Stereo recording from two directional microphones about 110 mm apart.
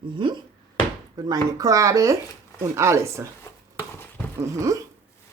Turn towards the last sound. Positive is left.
turn(degrees=-30)  # may be behind; listen again after turning